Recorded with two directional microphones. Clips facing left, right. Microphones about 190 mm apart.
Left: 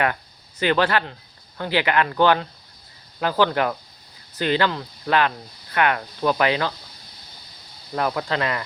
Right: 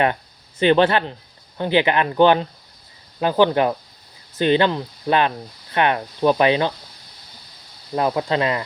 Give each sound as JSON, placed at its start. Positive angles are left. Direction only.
{"t": 0.6, "sound": "speech", "side_deg": -25}
{"t": 7.9, "sound": "speech", "side_deg": -25}